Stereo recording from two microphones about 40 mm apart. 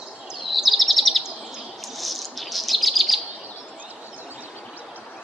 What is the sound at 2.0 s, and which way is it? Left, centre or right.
Chirp, centre.